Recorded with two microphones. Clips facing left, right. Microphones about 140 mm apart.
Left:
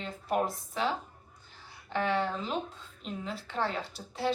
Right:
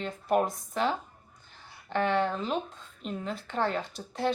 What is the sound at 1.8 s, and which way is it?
Speech, 5° left (ahead or behind).